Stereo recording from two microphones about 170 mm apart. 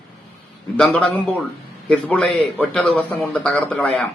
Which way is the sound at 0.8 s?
5° left (ahead or behind).